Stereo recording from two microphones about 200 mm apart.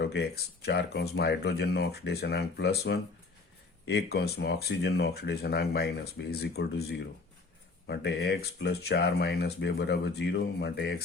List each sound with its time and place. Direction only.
0.0 s speech: 55° left (ahead or behind)